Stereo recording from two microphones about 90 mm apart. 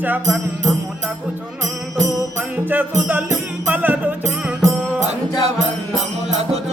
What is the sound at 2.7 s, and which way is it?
Music, 20° right (ahead or behind).